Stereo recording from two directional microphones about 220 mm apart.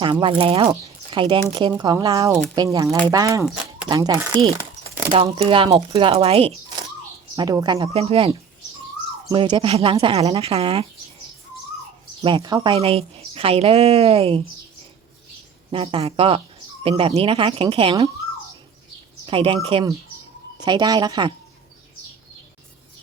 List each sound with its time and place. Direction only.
0.0 s a woman's voice: 20° right (ahead or behind)
3.4 s speech: 5° right (ahead or behind)
3.8 s a woman's voice: 20° right (ahead or behind)
9.3 s a woman's voice: 25° right (ahead or behind)
12.2 s a woman's voice: 20° right (ahead or behind)
15.7 s a woman's voice: 25° right (ahead or behind)
19.2 s a woman's voice: 25° right (ahead or behind)